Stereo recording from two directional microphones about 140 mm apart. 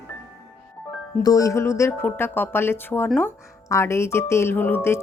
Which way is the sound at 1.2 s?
25° left (ahead or behind).